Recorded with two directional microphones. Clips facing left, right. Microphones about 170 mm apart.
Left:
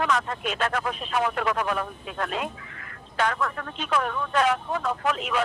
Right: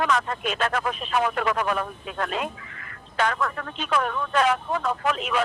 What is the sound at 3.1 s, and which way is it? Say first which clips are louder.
Speech: right 1 dB; 90° right.